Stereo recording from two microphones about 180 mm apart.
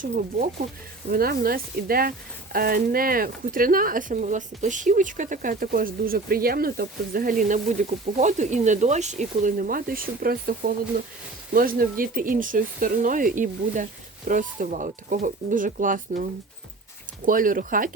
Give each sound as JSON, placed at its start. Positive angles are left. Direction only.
{"t": 0.0, "sound": "speech", "side_deg": -45}
{"t": 17.2, "sound": "speech", "side_deg": -50}